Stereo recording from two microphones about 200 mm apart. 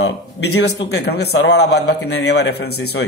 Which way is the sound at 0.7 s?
55° left (ahead or behind).